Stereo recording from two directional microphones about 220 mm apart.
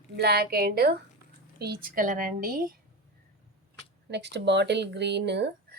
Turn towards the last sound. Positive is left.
turn(degrees=-50)  # may be behind; listen again after turning